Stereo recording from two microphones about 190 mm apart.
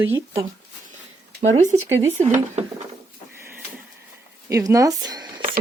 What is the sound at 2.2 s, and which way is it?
Speech, 40° right (ahead or behind).